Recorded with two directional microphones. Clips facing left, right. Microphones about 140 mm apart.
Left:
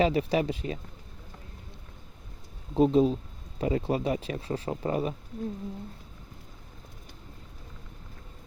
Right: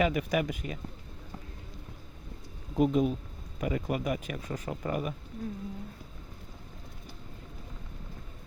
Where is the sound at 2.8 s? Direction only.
30° left (ahead or behind).